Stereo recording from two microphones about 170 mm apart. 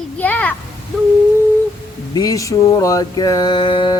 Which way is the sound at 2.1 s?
20° left (ahead or behind).